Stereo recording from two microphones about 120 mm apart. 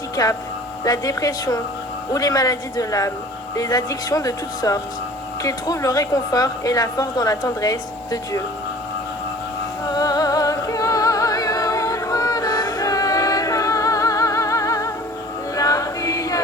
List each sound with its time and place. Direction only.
0.9 s a woman's voice: 30° left (ahead or behind)
9.9 s music: 30° left (ahead or behind)
15.5 s choir: 30° left (ahead or behind)